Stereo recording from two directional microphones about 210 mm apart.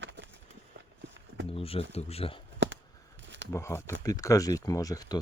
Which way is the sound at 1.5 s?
25° left (ahead or behind).